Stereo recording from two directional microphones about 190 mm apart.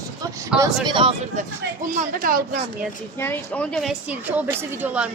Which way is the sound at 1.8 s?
50° right (ahead or behind).